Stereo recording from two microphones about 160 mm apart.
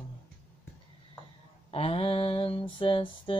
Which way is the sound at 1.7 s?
35° left (ahead or behind).